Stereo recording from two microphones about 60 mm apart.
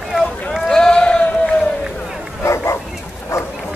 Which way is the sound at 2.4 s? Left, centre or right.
Left.